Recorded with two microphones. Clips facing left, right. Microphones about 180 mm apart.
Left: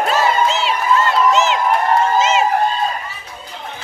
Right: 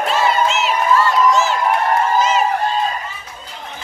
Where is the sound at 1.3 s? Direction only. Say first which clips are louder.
Left 1 dB; 20° left (ahead or behind).